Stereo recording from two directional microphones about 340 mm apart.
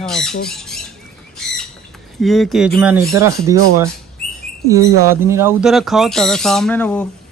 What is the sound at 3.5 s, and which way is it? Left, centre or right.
Speech, right.